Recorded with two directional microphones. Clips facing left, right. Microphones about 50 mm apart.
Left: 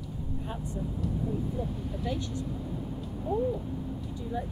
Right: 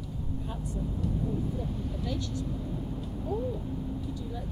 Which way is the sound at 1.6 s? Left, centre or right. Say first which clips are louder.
Left 1 dB; centre.